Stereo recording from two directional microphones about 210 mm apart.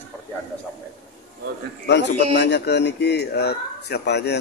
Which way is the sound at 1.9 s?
55° left (ahead or behind).